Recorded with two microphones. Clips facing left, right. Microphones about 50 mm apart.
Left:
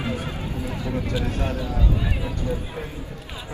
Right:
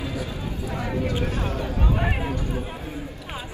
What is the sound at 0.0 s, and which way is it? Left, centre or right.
Music, left.